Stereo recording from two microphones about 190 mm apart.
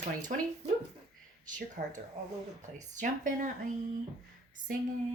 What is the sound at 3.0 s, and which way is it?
Speech, 40° right (ahead or behind).